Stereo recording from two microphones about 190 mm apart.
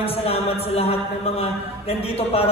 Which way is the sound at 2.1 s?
30° left (ahead or behind).